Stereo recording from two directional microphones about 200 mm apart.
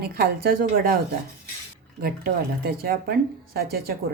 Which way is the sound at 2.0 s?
50° right (ahead or behind).